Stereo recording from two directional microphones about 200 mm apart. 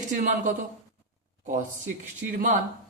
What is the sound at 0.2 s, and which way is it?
Speech, 40° right (ahead or behind).